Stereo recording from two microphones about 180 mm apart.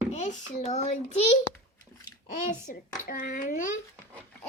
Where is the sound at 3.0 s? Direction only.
45° left (ahead or behind).